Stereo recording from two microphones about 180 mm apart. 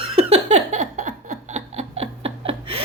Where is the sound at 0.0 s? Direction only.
35° right (ahead or behind).